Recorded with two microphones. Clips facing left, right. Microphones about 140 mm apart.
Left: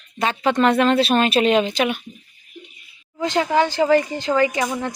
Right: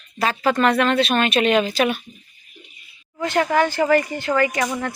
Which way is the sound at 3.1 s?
15° left (ahead or behind).